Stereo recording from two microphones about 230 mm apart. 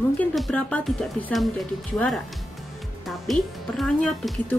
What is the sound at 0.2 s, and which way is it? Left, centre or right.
Speech, centre.